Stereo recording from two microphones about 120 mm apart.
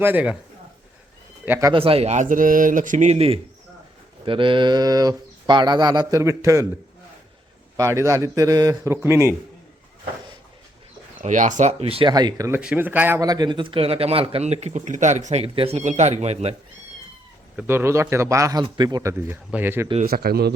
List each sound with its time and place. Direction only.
0.0 s speech: 15° right (ahead or behind)
1.7 s speech: 50° right (ahead or behind)
4.3 s mantra: 45° right (ahead or behind); by 6.7 s 25° right (ahead or behind)
7.8 s a man's voice: 25° right (ahead or behind)
11.2 s speech: 90° right; by 12.0 s 55° right (ahead or behind)
12.0 s mantra: 35° right (ahead or behind)
12.5 s speech: 15° right (ahead or behind)
13.1 s speech: 30° right (ahead or behind); by 15.4 s 70° right (ahead or behind)
15.5 s speech: 55° right (ahead or behind)
15.8 s speech: 80° right; by 16.6 s 60° right (ahead or behind)
17.6 s a man's voice: 20° right (ahead or behind)
18.6 s mantra: 35° right (ahead or behind)
19.3 s speech: 15° right (ahead or behind)
20.1 s speech: 90° right